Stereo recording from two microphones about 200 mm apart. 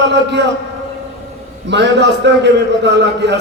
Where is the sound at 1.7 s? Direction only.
60° right (ahead or behind).